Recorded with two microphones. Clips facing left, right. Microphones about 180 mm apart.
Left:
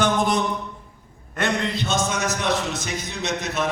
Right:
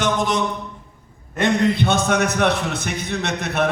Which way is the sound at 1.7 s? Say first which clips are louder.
Right 5 dB; 60° right (ahead or behind).